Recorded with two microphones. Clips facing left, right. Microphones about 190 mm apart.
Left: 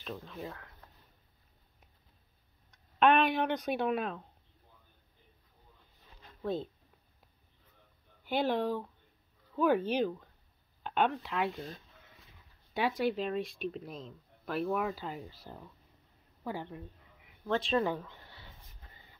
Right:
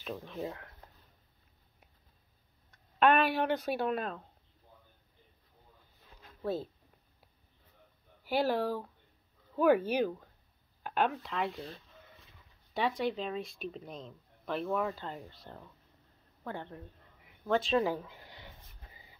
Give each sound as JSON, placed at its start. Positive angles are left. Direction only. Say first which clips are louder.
{"t": 0.2, "sound": "speech", "louder": "right 4 dB", "side_deg": -20}
{"t": 3.0, "sound": "speech", "louder": "even", "side_deg": -5}
{"t": 6.2, "sound": "a sound", "louder": "even", "side_deg": -5}
{"t": 8.2, "sound": "speech", "louder": "right 1 dB", "side_deg": -5}
{"t": 12.7, "sound": "speech", "louder": "left 1 dB", "side_deg": 5}
{"t": 18.0, "sound": "a sound", "louder": "right 2 dB", "side_deg": -10}